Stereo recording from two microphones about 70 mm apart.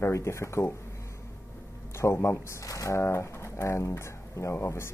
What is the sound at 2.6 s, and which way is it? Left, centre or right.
Speech, left.